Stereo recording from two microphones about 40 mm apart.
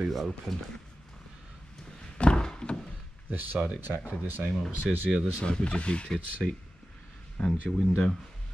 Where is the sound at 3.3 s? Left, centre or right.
Right.